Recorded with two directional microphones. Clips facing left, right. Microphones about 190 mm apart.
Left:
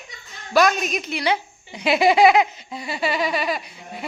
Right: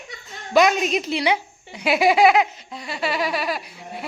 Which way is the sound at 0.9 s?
30° right (ahead or behind).